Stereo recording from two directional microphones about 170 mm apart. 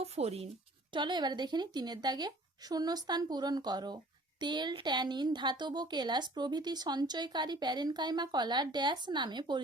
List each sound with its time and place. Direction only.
0.0 s speech: 35° right (ahead or behind)
0.9 s speech: 25° right (ahead or behind)